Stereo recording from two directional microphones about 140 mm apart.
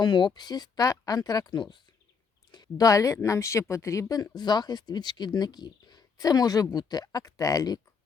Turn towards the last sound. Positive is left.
turn(degrees=25)  # may be behind; listen again after turning